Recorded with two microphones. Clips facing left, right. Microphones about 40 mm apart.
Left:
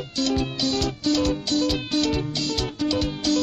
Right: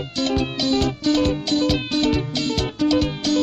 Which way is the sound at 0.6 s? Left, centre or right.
Right.